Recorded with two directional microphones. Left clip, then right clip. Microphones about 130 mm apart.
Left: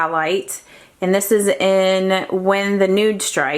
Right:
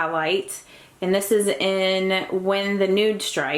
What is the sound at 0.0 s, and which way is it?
A woman's voice, 35° left (ahead or behind).